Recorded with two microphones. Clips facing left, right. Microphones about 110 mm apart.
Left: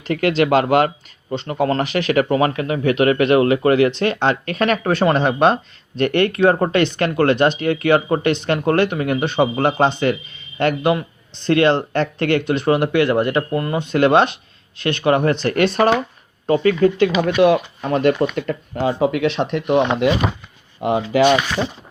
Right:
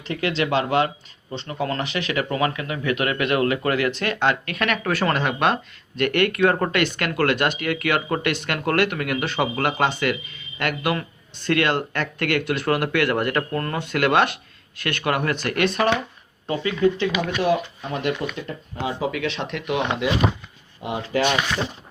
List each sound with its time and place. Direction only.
0.0 s speech: 45° left (ahead or behind)
16.5 s speech: 50° left (ahead or behind)
17.2 s speech: 80° left; by 19.3 s 60° left (ahead or behind)
19.4 s speech: 35° left (ahead or behind)
20.8 s speech: 90° left